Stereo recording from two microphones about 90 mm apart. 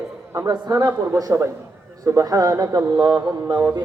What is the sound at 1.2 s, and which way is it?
A man's voice, 35° right (ahead or behind).